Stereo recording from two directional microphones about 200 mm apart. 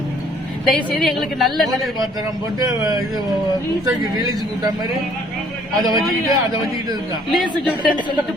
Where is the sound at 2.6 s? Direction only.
15° right (ahead or behind).